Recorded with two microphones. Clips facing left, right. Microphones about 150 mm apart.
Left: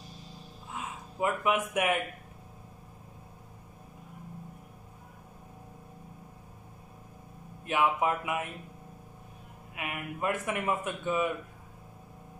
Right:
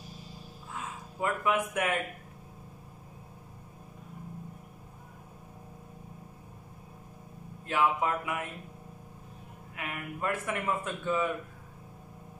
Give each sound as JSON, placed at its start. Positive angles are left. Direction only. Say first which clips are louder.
{"t": 0.7, "sound": "speech", "louder": "left 2 dB", "side_deg": 20}
{"t": 7.6, "sound": "a man's voice", "louder": "left 1 dB", "side_deg": 15}
{"t": 9.8, "sound": "a man's voice", "louder": "left 1 dB", "side_deg": 15}